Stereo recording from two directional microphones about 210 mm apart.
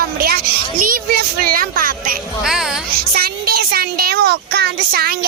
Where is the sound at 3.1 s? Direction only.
45° right (ahead or behind).